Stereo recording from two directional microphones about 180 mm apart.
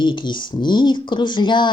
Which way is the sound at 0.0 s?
25° left (ahead or behind).